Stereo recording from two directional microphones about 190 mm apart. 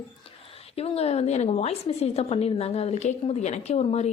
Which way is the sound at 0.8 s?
30° left (ahead or behind).